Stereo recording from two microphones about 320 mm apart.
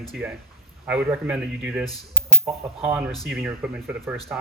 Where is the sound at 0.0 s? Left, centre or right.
Centre.